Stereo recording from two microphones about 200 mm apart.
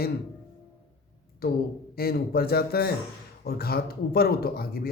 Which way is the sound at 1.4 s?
50° left (ahead or behind).